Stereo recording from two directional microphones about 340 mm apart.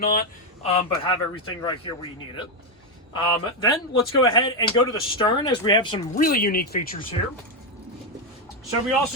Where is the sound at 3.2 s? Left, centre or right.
Centre.